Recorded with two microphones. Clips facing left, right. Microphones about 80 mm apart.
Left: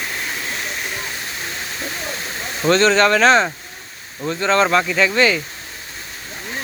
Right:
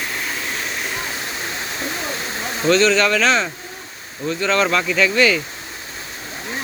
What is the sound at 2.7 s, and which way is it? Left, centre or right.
Speech, left.